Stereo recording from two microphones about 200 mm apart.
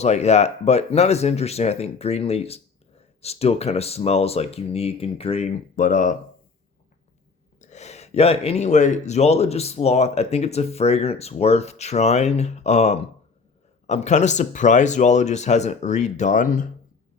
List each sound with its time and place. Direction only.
0.0 s speech: 35° left (ahead or behind)
7.6 s speech: 35° left (ahead or behind)